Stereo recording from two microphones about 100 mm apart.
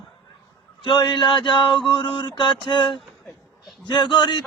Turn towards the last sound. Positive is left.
turn(degrees=50)  # may be behind; listen again after turning